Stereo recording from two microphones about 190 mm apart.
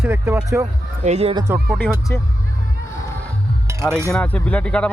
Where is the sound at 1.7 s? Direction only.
Centre (ahead or behind).